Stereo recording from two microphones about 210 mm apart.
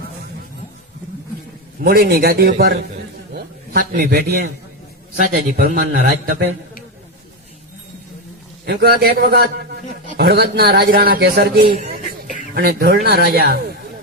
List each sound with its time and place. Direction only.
1.8 s a man's voice: 50° right (ahead or behind)
3.3 s a sound: 45° right (ahead or behind)
5.2 s a man's voice: 40° right (ahead or behind)
8.6 s a man's voice: 50° right (ahead or behind)